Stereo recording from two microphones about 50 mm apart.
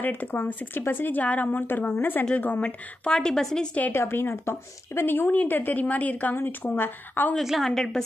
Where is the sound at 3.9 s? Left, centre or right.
Left.